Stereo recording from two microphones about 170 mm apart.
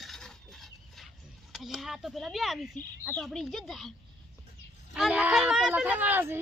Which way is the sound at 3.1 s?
Centre (ahead or behind).